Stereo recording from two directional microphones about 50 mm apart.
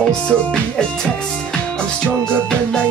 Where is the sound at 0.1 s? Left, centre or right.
Left.